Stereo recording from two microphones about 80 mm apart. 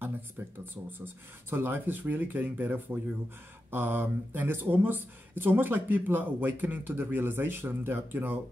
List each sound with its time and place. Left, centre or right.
0.4 s speech: right